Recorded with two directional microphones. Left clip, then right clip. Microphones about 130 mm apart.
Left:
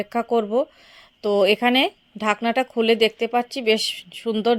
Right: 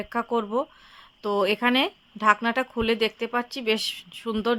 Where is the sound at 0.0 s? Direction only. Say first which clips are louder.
Left 5 dB; 25° left (ahead or behind).